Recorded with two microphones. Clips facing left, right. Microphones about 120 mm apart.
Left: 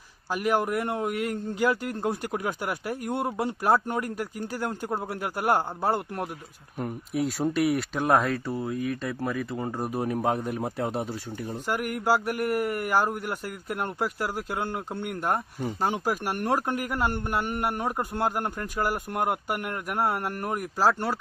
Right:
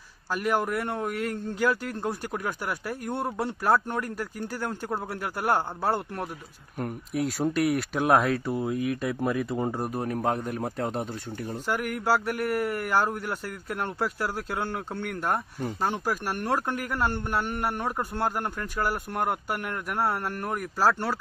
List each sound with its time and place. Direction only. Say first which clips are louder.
0.3 s a man's voice: left 1 dB; 10° left (ahead or behind)
6.7 s speech: left 1 dB; centre (ahead or behind)
9.8 s a man's voice: left 1 dB; 5° left (ahead or behind)
15.8 s a man's voice: left 1 dB; 15° left (ahead or behind)